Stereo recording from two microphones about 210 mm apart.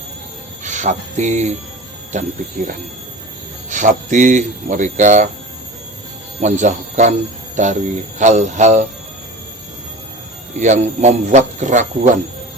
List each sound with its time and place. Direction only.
0.6 s speech: 35° right (ahead or behind)
3.7 s speech: 35° right (ahead or behind)
6.4 s speech: 35° right (ahead or behind)
10.6 s speech: 35° right (ahead or behind)